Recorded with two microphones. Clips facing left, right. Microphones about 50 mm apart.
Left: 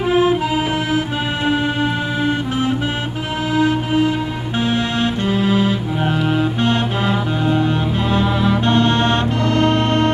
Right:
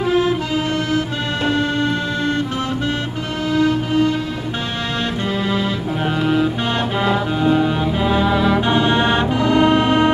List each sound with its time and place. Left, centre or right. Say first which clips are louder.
0.0 s accordion: left 2 dB; centre
0.9 s music: left 1 dB; centre
3.5 s music: even; centre